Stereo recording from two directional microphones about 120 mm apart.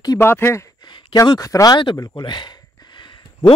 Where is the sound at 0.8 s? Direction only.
35° left (ahead or behind).